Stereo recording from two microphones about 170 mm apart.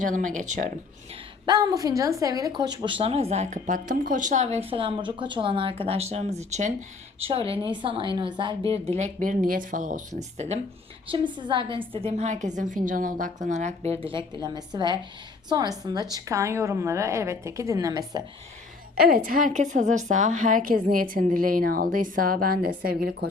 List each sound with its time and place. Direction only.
0.0 s speech: 50° right (ahead or behind)
1.5 s speech: 20° right (ahead or behind); by 6.7 s 45° right (ahead or behind)
7.3 s speech: 35° right (ahead or behind)
9.2 s speech: 55° right (ahead or behind)
11.1 s a woman's voice: 30° right (ahead or behind)
18.9 s a woman's voice: 60° right (ahead or behind)